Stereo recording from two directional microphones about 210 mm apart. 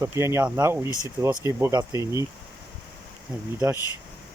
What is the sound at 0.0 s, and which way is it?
Speech, 10° right (ahead or behind).